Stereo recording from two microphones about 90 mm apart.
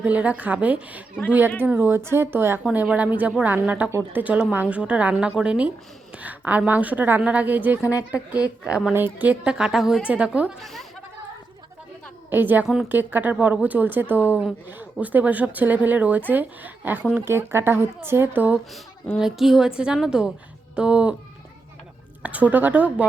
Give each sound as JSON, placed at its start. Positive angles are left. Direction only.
{"t": 0.0, "sound": "a woman's voice", "side_deg": -15}
{"t": 8.9, "sound": "a woman's voice", "side_deg": -25}
{"t": 10.6, "sound": "speech", "side_deg": 0}
{"t": 12.3, "sound": "speech", "side_deg": -20}
{"t": 19.2, "sound": "a woman's voice", "side_deg": -5}
{"t": 22.2, "sound": "a woman's voice", "side_deg": -15}